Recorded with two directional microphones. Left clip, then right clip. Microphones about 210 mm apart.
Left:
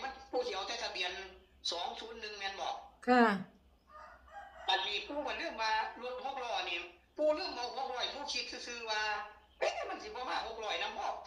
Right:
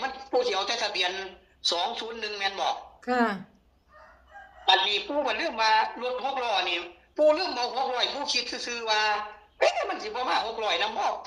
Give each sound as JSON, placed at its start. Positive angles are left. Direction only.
{"t": 0.0, "sound": "a man's voice", "side_deg": -50}
{"t": 3.0, "sound": "speech", "side_deg": -5}
{"t": 4.6, "sound": "a woman's voice", "side_deg": -50}